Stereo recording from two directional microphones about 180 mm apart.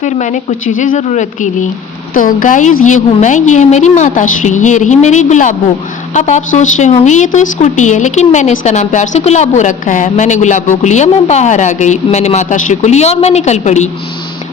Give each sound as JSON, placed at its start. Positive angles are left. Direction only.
{"t": 0.0, "sound": "a woman's voice", "side_deg": 40}